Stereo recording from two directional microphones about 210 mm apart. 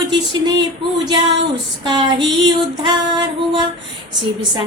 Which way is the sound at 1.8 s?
20° right (ahead or behind).